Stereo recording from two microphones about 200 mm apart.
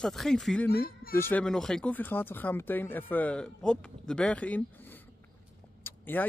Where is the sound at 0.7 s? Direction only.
50° left (ahead or behind).